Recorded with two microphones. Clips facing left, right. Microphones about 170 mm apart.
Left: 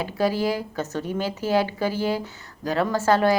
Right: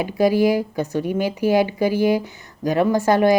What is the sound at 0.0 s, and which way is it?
Speech, 15° right (ahead or behind).